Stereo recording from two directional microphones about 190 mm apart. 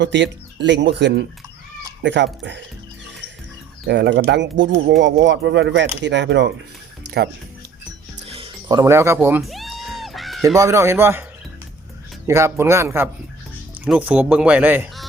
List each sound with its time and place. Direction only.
0.0 s speech: 70° right (ahead or behind)
3.8 s speech: 65° right (ahead or behind)
7.0 s music: 60° right (ahead or behind)
8.3 s speech: 25° right (ahead or behind)
9.4 s music: centre (ahead or behind)
10.6 s speech: 15° right (ahead or behind)
12.3 s speech: 15° right (ahead or behind)